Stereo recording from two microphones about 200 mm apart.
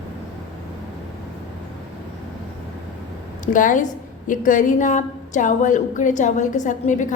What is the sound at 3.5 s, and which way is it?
A woman's voice, 40° left (ahead or behind).